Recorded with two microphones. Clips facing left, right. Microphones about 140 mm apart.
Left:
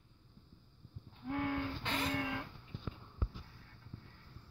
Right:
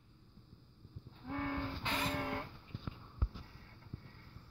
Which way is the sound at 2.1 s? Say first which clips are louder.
Left 1 dB; 45° right (ahead or behind).